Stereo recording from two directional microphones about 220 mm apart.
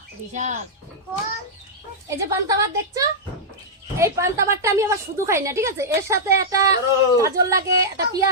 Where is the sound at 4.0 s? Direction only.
10° right (ahead or behind).